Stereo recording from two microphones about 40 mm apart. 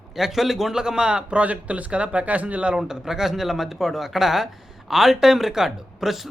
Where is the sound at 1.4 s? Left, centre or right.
Right.